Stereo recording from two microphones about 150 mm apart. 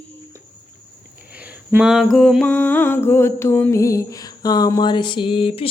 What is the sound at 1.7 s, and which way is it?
Mantra, 5° right (ahead or behind).